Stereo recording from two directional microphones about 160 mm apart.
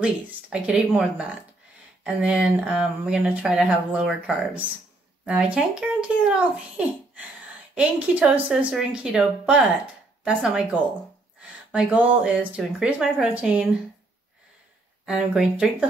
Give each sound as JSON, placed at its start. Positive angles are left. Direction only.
{"t": 0.0, "sound": "speech", "side_deg": -5}
{"t": 5.2, "sound": "speech", "side_deg": -5}
{"t": 15.0, "sound": "speech", "side_deg": -5}